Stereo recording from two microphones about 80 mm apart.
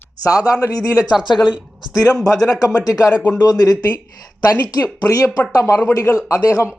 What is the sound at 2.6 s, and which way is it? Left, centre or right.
Speech, left.